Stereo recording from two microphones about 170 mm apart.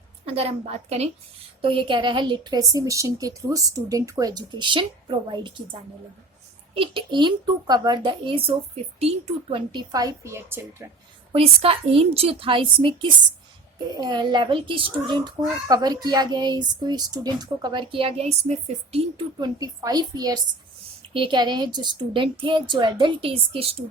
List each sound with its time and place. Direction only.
0.3 s a woman's voice: 35° right (ahead or behind)
6.7 s a child's voice: 30° right (ahead or behind)
11.3 s a woman's voice: 35° right (ahead or behind)